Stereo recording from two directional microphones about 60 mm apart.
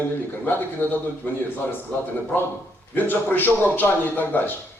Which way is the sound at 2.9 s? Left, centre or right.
Left.